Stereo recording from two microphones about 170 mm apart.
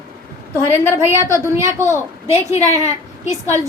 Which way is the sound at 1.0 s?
15° right (ahead or behind).